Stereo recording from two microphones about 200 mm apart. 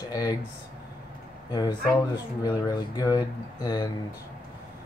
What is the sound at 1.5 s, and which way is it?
Speech, 20° left (ahead or behind).